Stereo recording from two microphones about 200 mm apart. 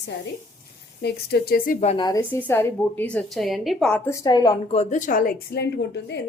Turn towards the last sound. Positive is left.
turn(degrees=55)  # may be behind; listen again after turning